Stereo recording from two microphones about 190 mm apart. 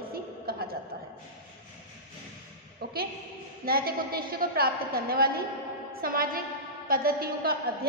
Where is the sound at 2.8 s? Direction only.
55° right (ahead or behind).